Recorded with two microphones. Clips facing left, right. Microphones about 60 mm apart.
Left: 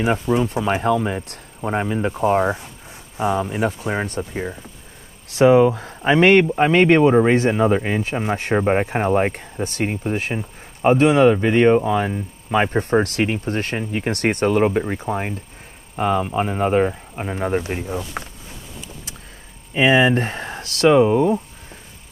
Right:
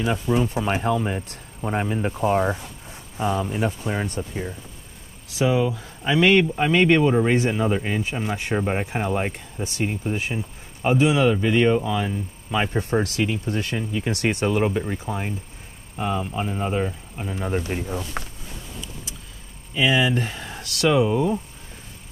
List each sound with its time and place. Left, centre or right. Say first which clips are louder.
0.0 s speech: left 3 dB; left
2.4 s speech: left 3 dB; centre
3.2 s speech: left 3 dB; left
9.3 s speech: left 5 dB; left
17.6 s speech: left 2 dB; left
17.8 s speech: left 2 dB; centre
19.7 s speech: left 5 dB; left